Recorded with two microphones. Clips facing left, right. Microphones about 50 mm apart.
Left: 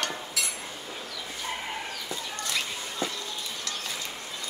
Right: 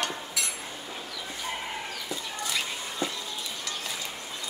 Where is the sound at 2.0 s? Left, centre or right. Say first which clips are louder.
Even; centre.